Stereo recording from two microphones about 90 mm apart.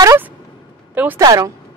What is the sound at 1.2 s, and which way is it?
Speech, 45° right (ahead or behind).